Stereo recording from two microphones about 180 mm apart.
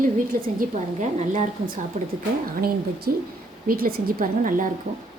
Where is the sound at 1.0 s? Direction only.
40° right (ahead or behind).